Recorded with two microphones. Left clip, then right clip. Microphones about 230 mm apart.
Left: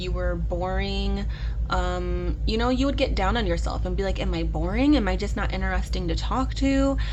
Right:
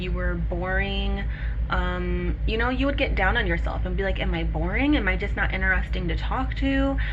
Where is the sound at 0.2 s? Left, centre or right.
Left.